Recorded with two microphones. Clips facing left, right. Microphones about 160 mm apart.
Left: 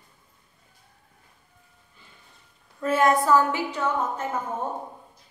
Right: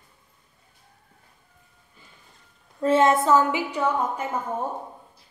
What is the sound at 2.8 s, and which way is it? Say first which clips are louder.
A woman's voice: right 2 dB; 25° right (ahead or behind).